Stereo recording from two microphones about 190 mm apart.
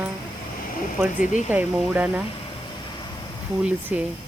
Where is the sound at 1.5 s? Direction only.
5° right (ahead or behind).